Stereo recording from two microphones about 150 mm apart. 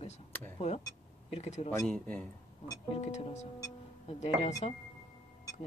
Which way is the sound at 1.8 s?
10° left (ahead or behind).